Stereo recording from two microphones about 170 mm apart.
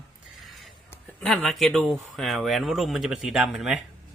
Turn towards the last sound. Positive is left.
turn(degrees=0)  # may be behind; listen again after turning